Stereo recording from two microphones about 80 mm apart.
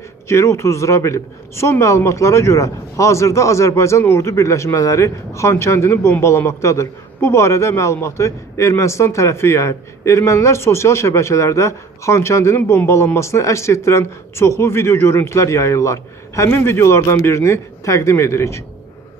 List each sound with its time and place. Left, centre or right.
0.3 s speech: left